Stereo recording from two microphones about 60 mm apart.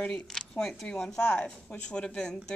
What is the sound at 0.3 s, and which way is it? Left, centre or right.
A woman's voice, centre.